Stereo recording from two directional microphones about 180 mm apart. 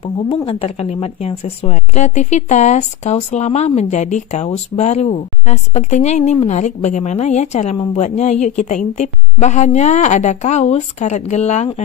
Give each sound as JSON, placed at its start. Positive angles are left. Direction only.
{"t": 0.0, "sound": "speech", "side_deg": 30}